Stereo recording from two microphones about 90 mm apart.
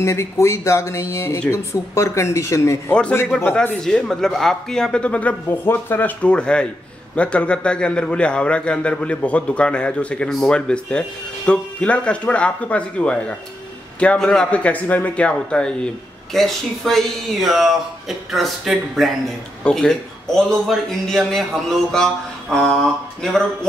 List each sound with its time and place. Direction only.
0.0 s speech: 30° left (ahead or behind)
2.9 s a man's voice: 15° left (ahead or behind)